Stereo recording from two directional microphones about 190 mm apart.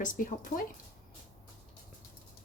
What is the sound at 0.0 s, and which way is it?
Speech, 45° left (ahead or behind).